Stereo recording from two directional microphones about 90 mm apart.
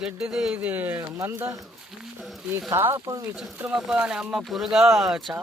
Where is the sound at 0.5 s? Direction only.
20° right (ahead or behind).